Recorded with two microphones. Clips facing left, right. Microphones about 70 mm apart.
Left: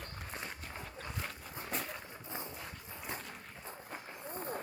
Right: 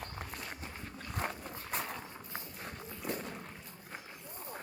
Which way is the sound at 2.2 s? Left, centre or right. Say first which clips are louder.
Left 2 dB; left.